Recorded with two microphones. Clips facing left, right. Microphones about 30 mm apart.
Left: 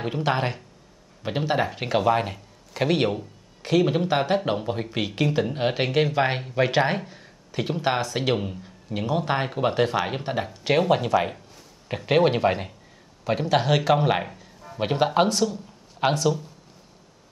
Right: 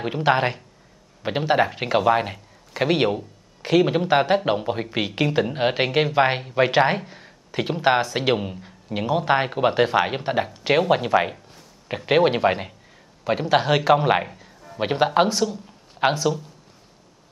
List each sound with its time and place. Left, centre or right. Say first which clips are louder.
0.0 s a man's voice: right 4 dB; centre